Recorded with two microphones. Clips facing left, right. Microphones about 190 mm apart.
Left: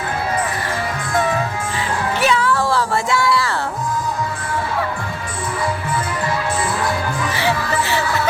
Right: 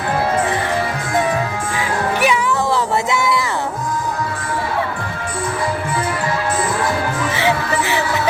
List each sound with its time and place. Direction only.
2.2 s music: 15° right (ahead or behind)
7.3 s music: 20° right (ahead or behind)